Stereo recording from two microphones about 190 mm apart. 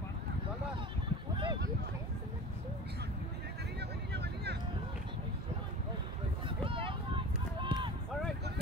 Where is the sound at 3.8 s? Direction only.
60° right (ahead or behind).